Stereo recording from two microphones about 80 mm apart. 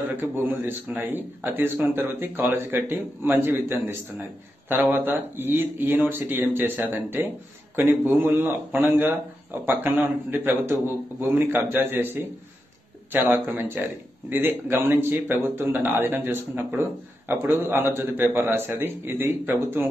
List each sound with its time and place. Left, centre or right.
0.1 s speech: right